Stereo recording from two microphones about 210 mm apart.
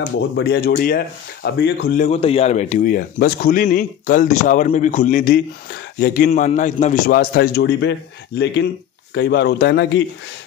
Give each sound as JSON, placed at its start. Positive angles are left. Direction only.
{"t": 0.4, "sound": "speech", "side_deg": 50}
{"t": 2.0, "sound": "a man's voice", "side_deg": 30}
{"t": 9.1, "sound": "speech", "side_deg": 50}